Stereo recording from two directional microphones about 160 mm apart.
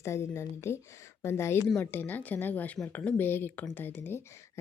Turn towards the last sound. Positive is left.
turn(degrees=15)  # may be behind; listen again after turning